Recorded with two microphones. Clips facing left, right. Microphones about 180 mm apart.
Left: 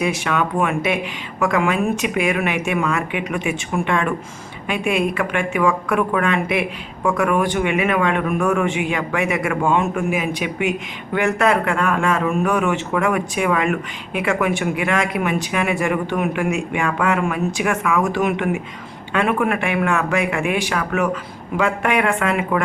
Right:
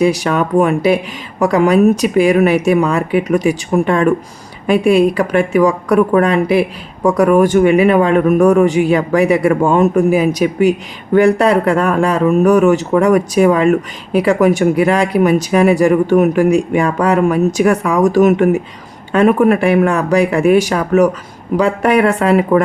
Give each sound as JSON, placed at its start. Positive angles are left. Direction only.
{"t": 0.0, "sound": "a woman's voice", "side_deg": -35}